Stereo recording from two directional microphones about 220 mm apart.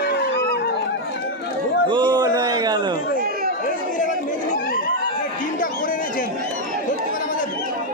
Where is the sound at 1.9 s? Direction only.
20° right (ahead or behind).